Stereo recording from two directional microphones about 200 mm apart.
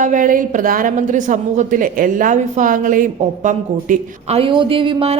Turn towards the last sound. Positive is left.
turn(degrees=-25)  # may be behind; listen again after turning